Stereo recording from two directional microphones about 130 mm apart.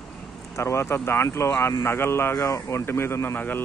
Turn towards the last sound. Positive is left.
turn(degrees=15)  # may be behind; listen again after turning